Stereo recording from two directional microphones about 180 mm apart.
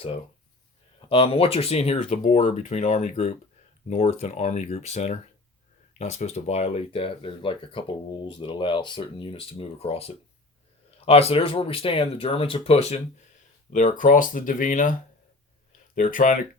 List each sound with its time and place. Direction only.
1.0 s speech: 30° left (ahead or behind); by 14.9 s 45° left (ahead or behind)
16.0 s speech: 50° left (ahead or behind)